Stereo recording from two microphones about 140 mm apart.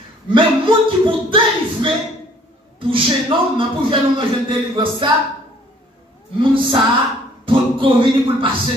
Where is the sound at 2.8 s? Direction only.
40° right (ahead or behind).